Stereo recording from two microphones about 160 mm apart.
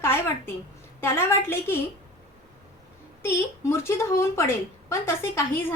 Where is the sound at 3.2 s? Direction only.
15° left (ahead or behind).